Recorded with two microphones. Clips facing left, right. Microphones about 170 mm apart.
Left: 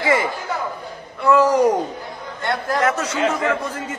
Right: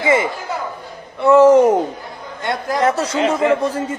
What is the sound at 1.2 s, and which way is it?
Speech, 25° right (ahead or behind).